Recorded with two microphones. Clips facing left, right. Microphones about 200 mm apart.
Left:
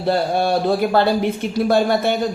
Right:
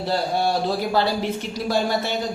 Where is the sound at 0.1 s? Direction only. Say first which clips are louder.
Left 5 dB; 55° left (ahead or behind).